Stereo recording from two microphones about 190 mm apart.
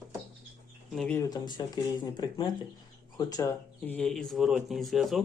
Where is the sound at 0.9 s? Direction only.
5° left (ahead or behind).